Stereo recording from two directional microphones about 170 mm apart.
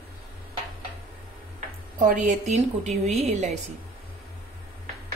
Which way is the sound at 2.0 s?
50° right (ahead or behind).